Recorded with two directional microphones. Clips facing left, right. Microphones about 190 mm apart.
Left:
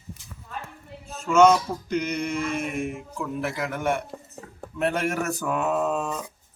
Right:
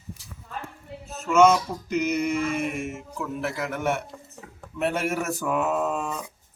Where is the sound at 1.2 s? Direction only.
5° right (ahead or behind).